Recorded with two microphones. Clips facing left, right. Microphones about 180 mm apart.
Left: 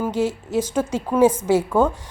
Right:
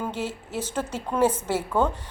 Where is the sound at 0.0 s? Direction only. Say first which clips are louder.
Left 8 dB; 10° left (ahead or behind).